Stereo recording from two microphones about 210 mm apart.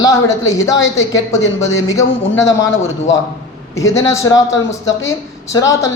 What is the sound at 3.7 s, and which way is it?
Speech, 15° left (ahead or behind).